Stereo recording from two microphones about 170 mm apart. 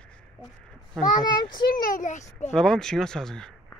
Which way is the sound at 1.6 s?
50° left (ahead or behind).